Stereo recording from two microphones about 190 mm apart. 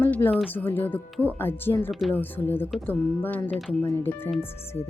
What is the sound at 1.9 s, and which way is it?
Speech, centre (ahead or behind).